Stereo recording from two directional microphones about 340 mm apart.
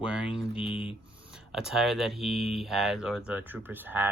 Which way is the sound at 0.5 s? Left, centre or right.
Centre.